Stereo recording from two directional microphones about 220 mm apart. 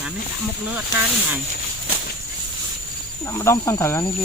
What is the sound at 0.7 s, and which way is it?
Speech, 5° right (ahead or behind).